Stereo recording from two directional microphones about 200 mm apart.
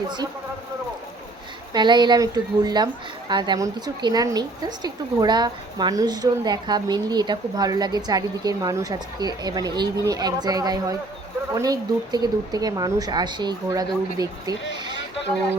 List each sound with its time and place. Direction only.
1.7 s a woman's voice: 20° right (ahead or behind)